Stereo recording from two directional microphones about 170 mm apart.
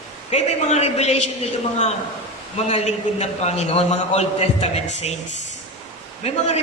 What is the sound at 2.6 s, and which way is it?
A man's voice, 40° left (ahead or behind).